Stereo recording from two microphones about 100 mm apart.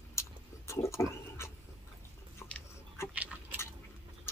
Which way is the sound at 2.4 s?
25° left (ahead or behind).